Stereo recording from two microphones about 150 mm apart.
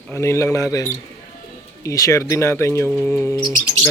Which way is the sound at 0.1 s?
20° left (ahead or behind).